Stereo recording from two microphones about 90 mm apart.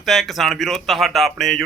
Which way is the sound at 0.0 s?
Centre (ahead or behind).